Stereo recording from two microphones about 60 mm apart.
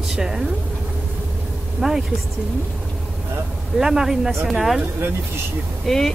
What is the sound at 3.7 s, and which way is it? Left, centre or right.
Speech, centre.